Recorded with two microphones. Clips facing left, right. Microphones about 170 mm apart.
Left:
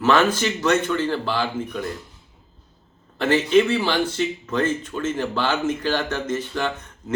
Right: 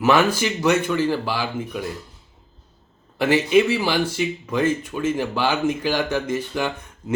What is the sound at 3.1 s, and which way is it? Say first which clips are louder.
Speech: even; 10° right (ahead or behind).